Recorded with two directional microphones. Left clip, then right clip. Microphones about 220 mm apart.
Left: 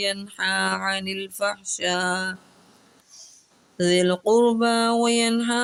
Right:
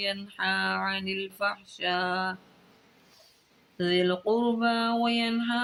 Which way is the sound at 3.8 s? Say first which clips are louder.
Left 6 dB; 55° left (ahead or behind).